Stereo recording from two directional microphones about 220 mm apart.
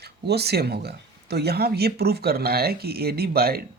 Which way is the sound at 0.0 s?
45° right (ahead or behind).